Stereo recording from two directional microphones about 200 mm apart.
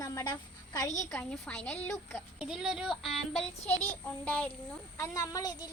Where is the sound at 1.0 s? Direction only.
10° left (ahead or behind).